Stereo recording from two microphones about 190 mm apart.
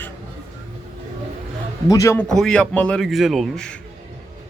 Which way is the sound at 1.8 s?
15° left (ahead or behind).